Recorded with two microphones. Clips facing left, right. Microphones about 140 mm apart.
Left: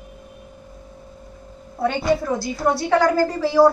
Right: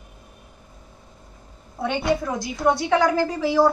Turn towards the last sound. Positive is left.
turn(degrees=0)  # may be behind; listen again after turning